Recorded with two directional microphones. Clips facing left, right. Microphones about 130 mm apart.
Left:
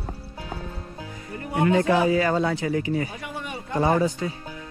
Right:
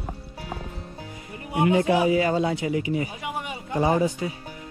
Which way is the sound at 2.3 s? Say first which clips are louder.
Even; 40° left (ahead or behind).